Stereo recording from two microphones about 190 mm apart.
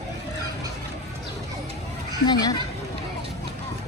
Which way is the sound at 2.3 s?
20° left (ahead or behind).